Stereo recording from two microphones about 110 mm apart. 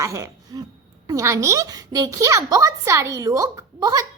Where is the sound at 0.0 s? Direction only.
30° right (ahead or behind).